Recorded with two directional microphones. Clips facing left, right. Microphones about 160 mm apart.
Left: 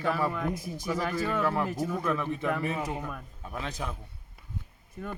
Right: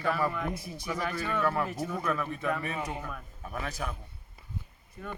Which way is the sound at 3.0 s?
15° left (ahead or behind).